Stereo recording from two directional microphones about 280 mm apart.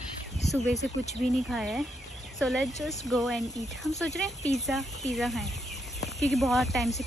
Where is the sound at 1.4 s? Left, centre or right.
Centre.